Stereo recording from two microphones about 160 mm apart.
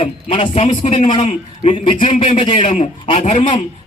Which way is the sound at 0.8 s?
50° left (ahead or behind).